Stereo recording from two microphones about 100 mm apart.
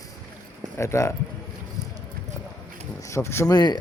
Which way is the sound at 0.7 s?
30° left (ahead or behind).